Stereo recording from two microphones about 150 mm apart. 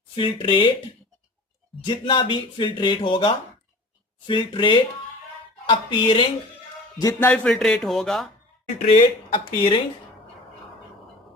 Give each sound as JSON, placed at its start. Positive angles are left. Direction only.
{"t": 0.2, "sound": "speech", "side_deg": 35}
{"t": 1.9, "sound": "speech", "side_deg": 30}
{"t": 7.0, "sound": "speech", "side_deg": 15}
{"t": 8.8, "sound": "speech", "side_deg": 45}